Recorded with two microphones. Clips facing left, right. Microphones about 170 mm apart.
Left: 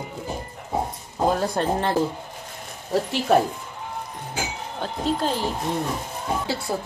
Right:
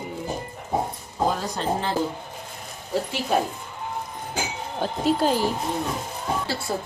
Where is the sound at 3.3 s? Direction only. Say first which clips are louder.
Left 5 dB; 70° left (ahead or behind).